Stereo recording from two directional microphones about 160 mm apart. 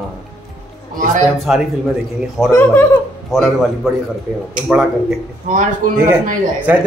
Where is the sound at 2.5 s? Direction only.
15° left (ahead or behind).